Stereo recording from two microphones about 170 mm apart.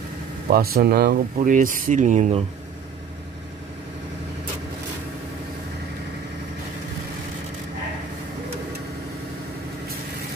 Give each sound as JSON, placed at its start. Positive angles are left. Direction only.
{"t": 0.5, "sound": "speech", "side_deg": -65}